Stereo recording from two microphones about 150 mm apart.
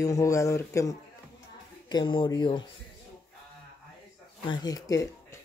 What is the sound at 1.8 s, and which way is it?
Speech, 30° left (ahead or behind).